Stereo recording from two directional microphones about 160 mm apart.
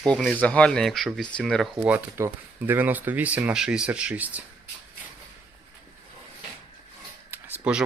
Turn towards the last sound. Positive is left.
turn(degrees=-10)  # may be behind; listen again after turning